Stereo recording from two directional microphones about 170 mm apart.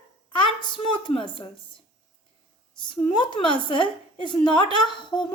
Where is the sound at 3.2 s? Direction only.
25° left (ahead or behind).